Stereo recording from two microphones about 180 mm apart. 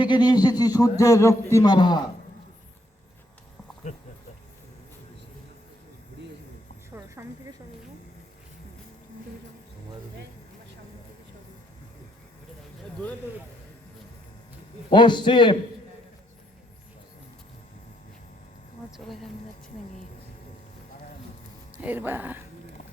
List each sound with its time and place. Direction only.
0.0 s a man's voice: 25° left (ahead or behind)
7.2 s snake: 15° right (ahead or behind)
14.8 s a man's voice: 25° left (ahead or behind)
18.9 s speech: centre (ahead or behind)
21.8 s speech: 10° right (ahead or behind)